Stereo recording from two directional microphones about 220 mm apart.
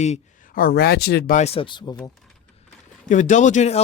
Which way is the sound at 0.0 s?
35° left (ahead or behind).